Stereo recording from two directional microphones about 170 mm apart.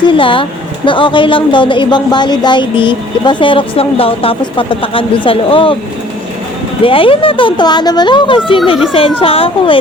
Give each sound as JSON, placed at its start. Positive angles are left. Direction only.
{"t": 0.0, "sound": "speech", "side_deg": 30}
{"t": 6.8, "sound": "speech", "side_deg": 30}